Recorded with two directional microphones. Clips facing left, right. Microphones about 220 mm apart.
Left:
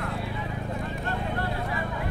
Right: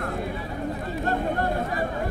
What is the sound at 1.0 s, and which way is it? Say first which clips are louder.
Vehicle: right 8 dB; 45° right (ahead or behind).